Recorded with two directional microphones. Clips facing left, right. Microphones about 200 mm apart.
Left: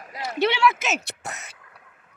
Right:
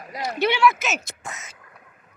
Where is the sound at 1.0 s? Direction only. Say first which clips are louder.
Left 2 dB; 65° left (ahead or behind).